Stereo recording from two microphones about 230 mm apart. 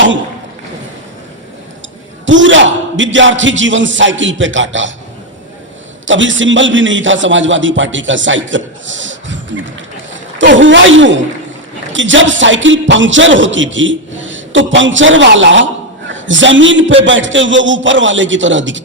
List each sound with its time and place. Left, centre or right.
2.2 s a man's voice: right
6.1 s a man's voice: right